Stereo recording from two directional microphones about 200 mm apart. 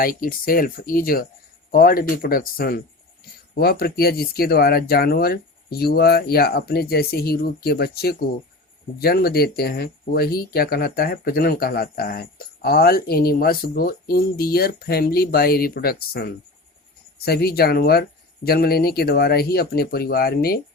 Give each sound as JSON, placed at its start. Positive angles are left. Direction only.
{"t": 0.0, "sound": "speech", "side_deg": 45}